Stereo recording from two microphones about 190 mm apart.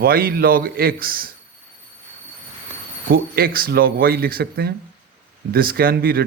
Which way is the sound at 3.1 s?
50° right (ahead or behind).